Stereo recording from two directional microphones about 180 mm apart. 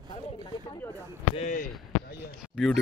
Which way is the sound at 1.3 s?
40° left (ahead or behind).